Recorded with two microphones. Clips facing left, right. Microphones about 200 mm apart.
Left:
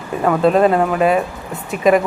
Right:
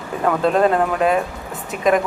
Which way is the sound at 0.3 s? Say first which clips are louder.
Left 3 dB; 5° left (ahead or behind).